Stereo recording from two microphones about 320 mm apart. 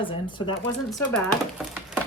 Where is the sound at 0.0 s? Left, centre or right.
Centre.